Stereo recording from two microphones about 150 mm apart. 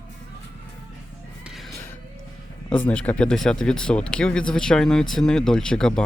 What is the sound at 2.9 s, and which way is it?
Speech, 5° left (ahead or behind).